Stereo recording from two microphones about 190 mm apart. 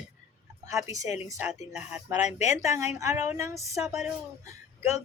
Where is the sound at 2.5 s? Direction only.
15° right (ahead or behind).